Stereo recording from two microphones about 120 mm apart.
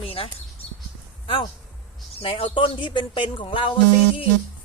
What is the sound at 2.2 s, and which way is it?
Speech, 50° left (ahead or behind).